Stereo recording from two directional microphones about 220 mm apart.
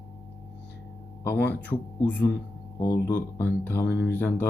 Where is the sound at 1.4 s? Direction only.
10° left (ahead or behind).